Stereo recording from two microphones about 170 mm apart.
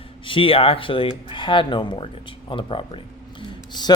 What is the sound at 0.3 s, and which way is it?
Speech, 30° left (ahead or behind).